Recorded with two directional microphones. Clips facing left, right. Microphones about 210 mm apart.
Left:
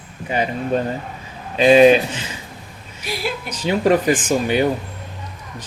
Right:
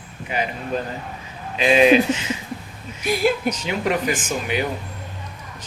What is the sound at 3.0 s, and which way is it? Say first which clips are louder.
Speech: right 6 dB; 50° right (ahead or behind).